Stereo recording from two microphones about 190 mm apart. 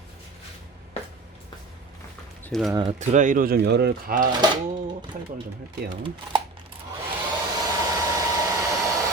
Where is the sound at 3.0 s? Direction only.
40° right (ahead or behind).